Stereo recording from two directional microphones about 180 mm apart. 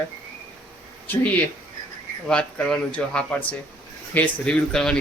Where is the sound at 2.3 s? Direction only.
5° left (ahead or behind).